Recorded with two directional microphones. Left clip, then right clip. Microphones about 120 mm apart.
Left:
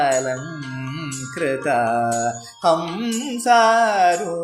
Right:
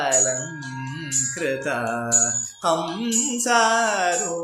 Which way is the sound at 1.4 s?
30° left (ahead or behind).